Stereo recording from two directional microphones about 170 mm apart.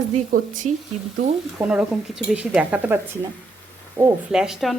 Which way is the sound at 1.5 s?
5° right (ahead or behind).